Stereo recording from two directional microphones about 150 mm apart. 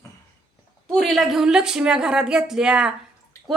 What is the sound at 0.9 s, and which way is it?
A woman's voice, centre (ahead or behind).